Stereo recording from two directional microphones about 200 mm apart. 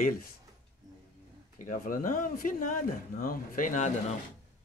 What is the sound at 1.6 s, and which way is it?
Speech, 40° left (ahead or behind).